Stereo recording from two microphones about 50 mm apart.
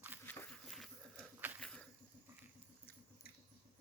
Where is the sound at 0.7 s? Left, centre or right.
Centre.